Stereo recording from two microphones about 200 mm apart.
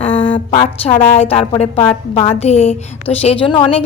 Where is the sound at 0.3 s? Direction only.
25° left (ahead or behind).